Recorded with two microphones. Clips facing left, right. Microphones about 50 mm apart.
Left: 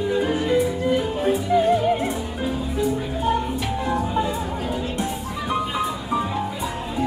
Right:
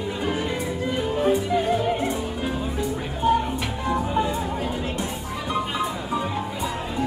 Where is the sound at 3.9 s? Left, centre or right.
Centre.